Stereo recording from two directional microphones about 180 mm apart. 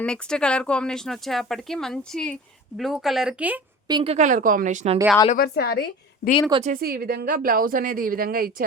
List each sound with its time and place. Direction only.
0.0 s speech: 5° left (ahead or behind)
3.8 s speech: 25° right (ahead or behind)
4.1 s a woman's voice: 45° right (ahead or behind)
5.3 s a woman's voice: 60° left (ahead or behind)
6.5 s speech: 35° right (ahead or behind)
6.7 s a woman's voice: 55° right (ahead or behind)